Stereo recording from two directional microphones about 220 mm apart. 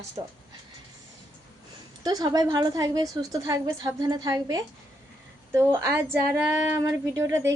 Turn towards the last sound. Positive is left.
turn(degrees=-15)  # may be behind; listen again after turning